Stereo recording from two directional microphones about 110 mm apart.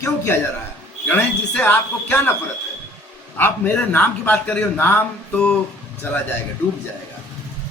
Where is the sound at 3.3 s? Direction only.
15° left (ahead or behind).